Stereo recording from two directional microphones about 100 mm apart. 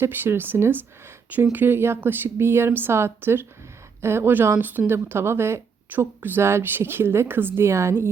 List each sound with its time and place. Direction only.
0.0 s speech: 25° right (ahead or behind)